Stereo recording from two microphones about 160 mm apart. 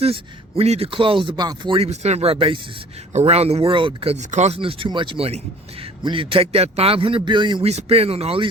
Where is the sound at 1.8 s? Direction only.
45° right (ahead or behind).